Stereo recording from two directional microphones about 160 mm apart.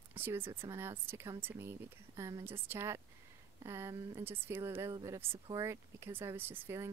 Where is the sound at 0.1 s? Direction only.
15° right (ahead or behind).